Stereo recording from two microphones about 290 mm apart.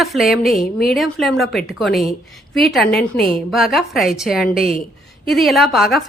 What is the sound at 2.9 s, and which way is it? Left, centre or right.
Speech, left.